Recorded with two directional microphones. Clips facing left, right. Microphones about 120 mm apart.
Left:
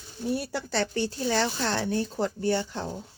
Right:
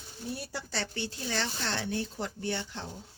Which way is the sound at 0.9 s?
40° left (ahead or behind).